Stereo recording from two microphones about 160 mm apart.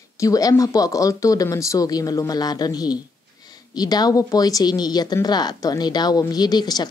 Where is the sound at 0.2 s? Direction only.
20° left (ahead or behind).